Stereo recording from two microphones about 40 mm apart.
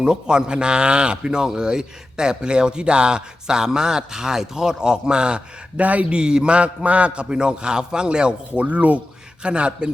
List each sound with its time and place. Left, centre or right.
0.0 s a man's voice: centre
5.8 s speech: right
6.1 s a man's voice: right
8.5 s speech: right
9.4 s a man's voice: right